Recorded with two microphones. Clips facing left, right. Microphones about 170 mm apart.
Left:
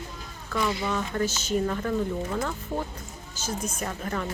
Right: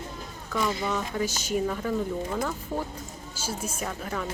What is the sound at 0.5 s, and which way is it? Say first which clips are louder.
A woman's voice: even; 5° right (ahead or behind).